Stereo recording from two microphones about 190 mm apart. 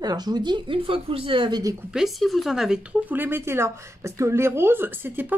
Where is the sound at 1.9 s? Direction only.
Centre (ahead or behind).